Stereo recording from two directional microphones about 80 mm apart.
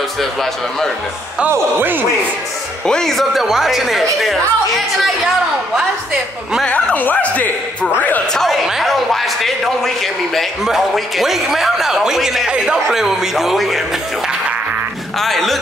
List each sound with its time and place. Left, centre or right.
0.2 s a man's voice: centre
1.5 s speech: right
2.9 s a man's voice: centre
6.7 s speech: centre
8.3 s a man's voice: centre
15.1 s a man's voice: centre